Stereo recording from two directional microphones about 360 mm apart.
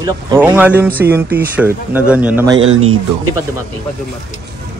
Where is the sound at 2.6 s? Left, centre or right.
Right.